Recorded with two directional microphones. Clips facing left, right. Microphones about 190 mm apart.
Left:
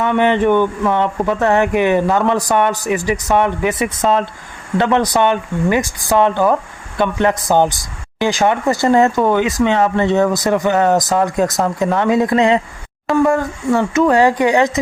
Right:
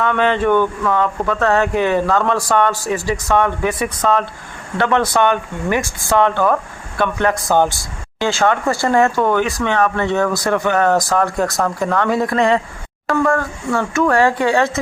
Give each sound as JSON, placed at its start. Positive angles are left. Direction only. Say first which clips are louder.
{"t": 0.0, "sound": "speech", "louder": "left 2 dB", "side_deg": 15}